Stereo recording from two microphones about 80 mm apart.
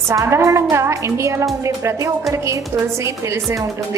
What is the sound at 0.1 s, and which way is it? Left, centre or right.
Speech, right.